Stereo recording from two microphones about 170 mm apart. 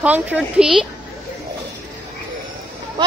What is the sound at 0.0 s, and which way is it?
Speech, 10° right (ahead or behind).